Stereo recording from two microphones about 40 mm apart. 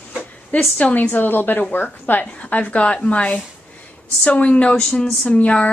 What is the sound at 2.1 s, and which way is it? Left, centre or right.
A woman's voice, left.